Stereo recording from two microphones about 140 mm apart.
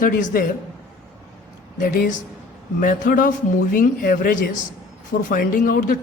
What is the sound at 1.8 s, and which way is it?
Speech, 85° left.